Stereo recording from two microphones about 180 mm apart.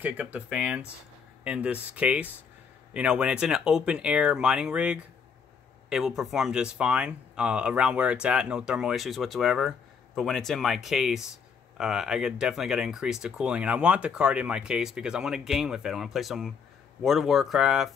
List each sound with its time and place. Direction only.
0.0 s speech: 10° right (ahead or behind)